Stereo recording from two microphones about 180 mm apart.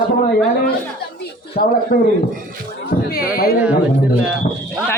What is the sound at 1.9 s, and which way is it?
Speech, 55° left (ahead or behind).